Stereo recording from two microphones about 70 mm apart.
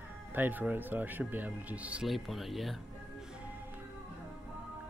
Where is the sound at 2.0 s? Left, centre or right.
Centre.